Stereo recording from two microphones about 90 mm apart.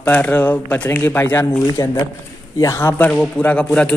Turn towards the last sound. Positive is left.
turn(degrees=15)  # may be behind; listen again after turning